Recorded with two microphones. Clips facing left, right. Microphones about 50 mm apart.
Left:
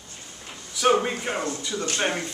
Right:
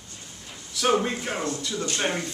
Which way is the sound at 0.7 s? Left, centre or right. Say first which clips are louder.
Left 2 dB; centre.